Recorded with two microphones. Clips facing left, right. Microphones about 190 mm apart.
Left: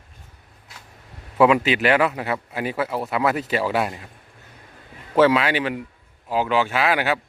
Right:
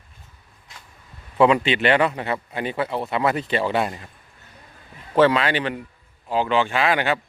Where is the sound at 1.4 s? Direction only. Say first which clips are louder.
Even; 5° left (ahead or behind).